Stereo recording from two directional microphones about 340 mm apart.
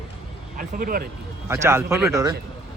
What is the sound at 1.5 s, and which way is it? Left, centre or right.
Speech, centre.